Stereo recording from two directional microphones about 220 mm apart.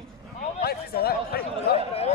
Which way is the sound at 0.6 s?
45° left (ahead or behind).